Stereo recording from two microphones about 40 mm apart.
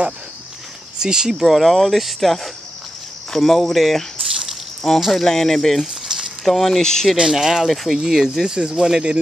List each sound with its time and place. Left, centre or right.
0.9 s speech: centre
1.4 s speech: centre
6.0 s a sound: centre
6.4 s speech: centre
6.8 s speech: centre
7.2 s speech: centre
7.6 s speech: centre
8.5 s speech: right
8.7 s speech: centre